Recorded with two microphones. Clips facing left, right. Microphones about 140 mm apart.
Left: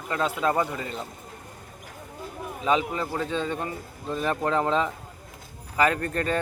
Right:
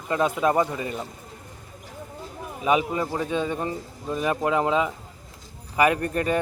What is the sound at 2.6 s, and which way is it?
Speech, 15° right (ahead or behind).